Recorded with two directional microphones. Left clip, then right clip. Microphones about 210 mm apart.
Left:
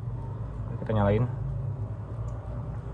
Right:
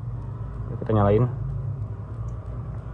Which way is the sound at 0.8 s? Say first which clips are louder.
Right 6 dB; 15° right (ahead or behind).